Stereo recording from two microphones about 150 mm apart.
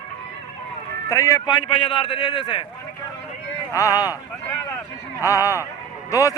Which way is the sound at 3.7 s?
20° left (ahead or behind).